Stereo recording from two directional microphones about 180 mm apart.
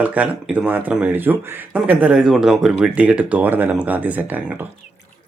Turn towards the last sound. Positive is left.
turn(degrees=-10)  # may be behind; listen again after turning